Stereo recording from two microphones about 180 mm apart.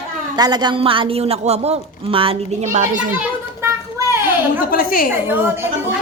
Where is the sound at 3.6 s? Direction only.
15° right (ahead or behind).